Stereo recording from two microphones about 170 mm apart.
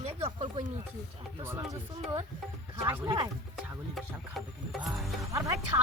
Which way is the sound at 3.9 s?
Centre (ahead or behind).